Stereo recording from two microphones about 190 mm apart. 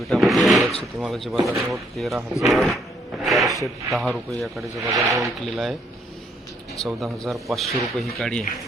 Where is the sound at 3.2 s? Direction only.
Centre (ahead or behind).